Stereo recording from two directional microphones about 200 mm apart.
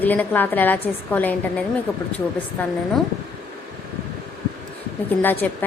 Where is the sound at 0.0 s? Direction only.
10° left (ahead or behind).